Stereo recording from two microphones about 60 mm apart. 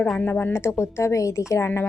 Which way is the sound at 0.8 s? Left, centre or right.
Left.